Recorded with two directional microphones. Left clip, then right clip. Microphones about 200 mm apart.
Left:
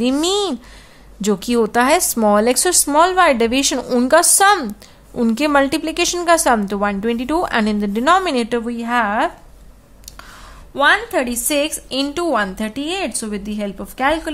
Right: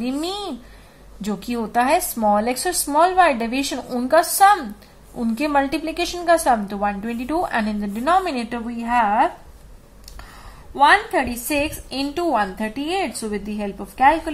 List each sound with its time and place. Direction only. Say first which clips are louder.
0.0 s a woman's voice: left 8 dB; 45° left (ahead or behind)
10.7 s a woman's voice: even; 40° left (ahead or behind)